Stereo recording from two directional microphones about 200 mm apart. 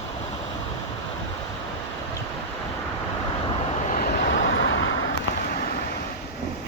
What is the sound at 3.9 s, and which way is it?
Vehicle, 45° left (ahead or behind).